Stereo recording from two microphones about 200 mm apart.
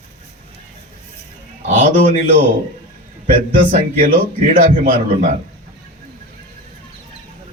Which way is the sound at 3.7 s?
45° right (ahead or behind).